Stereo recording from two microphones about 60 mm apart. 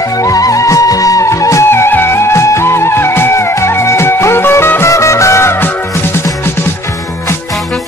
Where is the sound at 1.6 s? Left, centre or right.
Left.